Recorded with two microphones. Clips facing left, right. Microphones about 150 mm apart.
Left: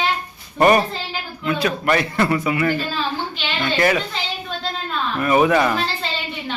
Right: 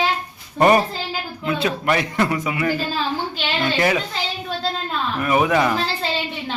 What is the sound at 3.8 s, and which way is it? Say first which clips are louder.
Speech: left 2 dB; 15° right (ahead or behind).